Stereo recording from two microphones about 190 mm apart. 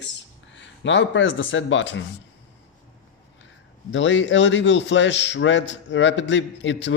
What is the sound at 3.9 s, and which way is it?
A man's voice, 75° left (ahead or behind).